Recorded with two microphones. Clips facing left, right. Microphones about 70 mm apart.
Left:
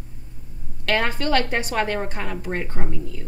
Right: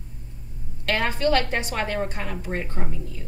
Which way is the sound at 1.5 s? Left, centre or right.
Left.